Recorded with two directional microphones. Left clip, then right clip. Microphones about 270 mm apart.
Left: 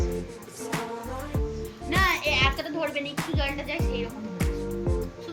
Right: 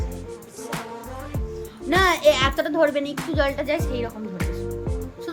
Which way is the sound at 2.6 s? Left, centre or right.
Centre.